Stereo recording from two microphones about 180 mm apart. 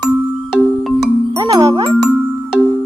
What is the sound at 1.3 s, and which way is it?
Music, 15° right (ahead or behind).